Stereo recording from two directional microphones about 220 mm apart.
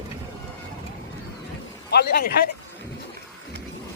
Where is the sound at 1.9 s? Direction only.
45° left (ahead or behind).